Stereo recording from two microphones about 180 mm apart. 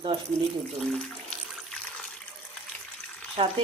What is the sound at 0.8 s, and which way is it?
Water, 5° left (ahead or behind).